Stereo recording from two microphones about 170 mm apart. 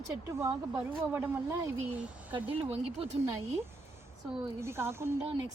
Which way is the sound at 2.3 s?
30° right (ahead or behind).